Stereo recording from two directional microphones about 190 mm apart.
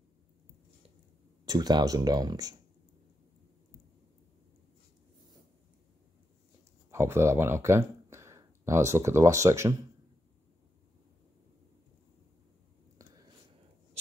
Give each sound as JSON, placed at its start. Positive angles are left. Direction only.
{"t": 1.4, "sound": "speech", "side_deg": -20}
{"t": 6.9, "sound": "speech", "side_deg": -15}
{"t": 12.9, "sound": "a sound", "side_deg": -20}